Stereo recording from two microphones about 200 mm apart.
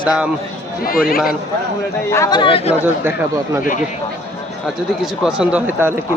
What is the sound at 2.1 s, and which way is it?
Speech, 20° left (ahead or behind).